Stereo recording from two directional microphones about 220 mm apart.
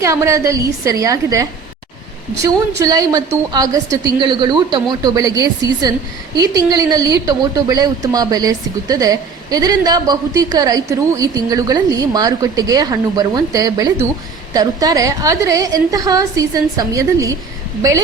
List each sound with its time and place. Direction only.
0.0 s a woman's voice: 15° right (ahead or behind)